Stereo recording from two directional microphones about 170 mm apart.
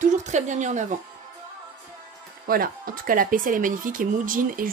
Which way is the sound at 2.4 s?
60° right (ahead or behind).